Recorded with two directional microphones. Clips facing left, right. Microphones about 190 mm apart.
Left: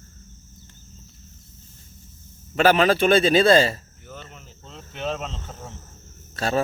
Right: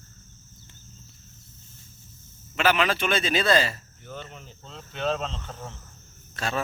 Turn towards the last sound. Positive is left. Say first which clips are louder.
# left 6 dB
turn(degrees=35)  # may be behind; listen again after turning